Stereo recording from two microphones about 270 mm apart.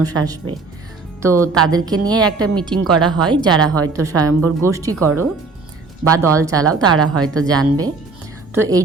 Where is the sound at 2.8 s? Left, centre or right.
Centre.